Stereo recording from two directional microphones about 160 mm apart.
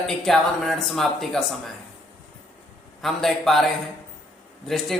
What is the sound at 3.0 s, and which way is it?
Speech, centre (ahead or behind).